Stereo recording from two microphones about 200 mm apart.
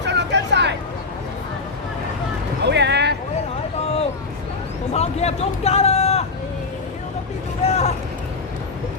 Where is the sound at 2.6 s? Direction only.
60° right (ahead or behind).